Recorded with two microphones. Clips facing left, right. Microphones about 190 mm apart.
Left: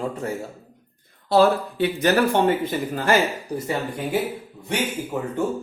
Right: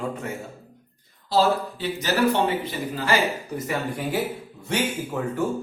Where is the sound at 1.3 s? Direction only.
60° left (ahead or behind).